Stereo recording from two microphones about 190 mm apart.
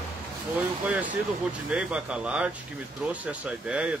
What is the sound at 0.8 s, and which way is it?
Speech, 5° right (ahead or behind).